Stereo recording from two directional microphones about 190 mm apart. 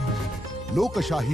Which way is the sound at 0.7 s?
Centre (ahead or behind).